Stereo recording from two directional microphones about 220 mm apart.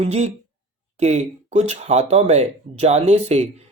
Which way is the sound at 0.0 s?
30° right (ahead or behind).